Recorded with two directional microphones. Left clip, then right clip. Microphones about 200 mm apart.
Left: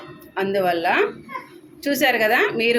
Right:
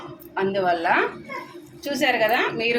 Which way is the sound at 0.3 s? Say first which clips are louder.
Left 1 dB; 30° left (ahead or behind).